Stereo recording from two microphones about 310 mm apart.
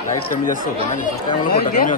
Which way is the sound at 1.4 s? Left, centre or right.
Left.